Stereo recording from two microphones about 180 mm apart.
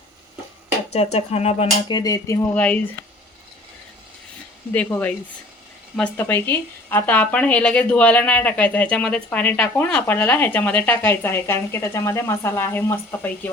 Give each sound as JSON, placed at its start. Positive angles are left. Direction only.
{"t": 0.9, "sound": "speech", "side_deg": 35}
{"t": 2.0, "sound": "cutlery", "side_deg": 20}
{"t": 2.6, "sound": "speech", "side_deg": 5}
{"t": 4.7, "sound": "speech", "side_deg": 10}